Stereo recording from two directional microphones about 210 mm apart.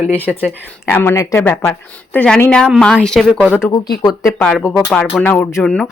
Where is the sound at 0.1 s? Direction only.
10° left (ahead or behind).